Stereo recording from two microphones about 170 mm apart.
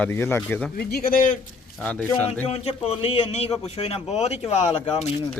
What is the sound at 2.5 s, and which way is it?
A man's voice, 35° left (ahead or behind).